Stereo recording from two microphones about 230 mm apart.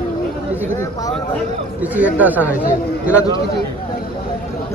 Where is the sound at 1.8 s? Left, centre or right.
Centre.